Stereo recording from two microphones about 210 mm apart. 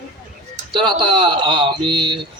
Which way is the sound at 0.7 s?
25° right (ahead or behind).